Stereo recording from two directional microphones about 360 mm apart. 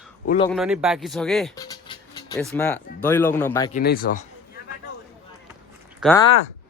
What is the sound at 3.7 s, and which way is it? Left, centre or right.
Speech, left.